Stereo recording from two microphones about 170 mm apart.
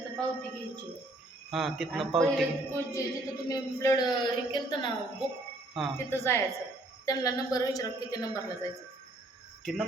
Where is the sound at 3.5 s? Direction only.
20° left (ahead or behind).